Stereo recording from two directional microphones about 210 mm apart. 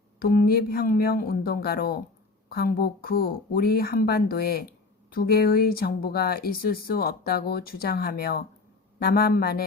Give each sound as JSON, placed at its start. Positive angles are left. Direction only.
{"t": 0.2, "sound": "speech", "side_deg": 45}